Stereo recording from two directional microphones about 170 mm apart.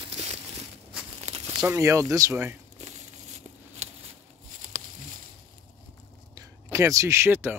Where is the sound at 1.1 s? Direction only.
40° right (ahead or behind).